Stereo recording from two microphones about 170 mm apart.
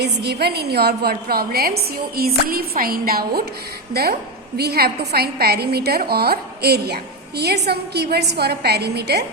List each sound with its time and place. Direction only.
0.0 s a woman's voice: 75° right (ahead or behind)
4.5 s a woman's voice: 70° right (ahead or behind)